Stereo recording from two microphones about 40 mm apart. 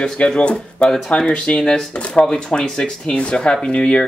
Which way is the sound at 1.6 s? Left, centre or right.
Centre.